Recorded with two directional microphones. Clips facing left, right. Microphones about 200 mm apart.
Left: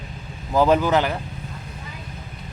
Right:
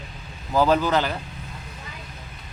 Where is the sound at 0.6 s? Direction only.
15° left (ahead or behind).